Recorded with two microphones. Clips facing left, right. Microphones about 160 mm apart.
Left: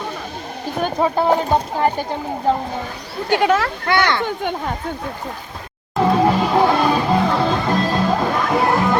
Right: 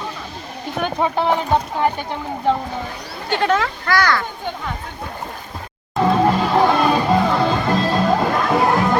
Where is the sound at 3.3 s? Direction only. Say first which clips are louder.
Left 2 dB; 5° left (ahead or behind).